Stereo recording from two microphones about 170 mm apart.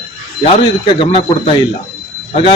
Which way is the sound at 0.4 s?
30° left (ahead or behind).